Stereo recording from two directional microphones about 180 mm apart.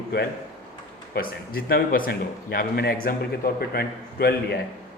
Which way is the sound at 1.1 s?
55° left (ahead or behind).